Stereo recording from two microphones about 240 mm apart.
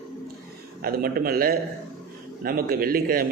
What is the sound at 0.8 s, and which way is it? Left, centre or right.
A man's voice, right.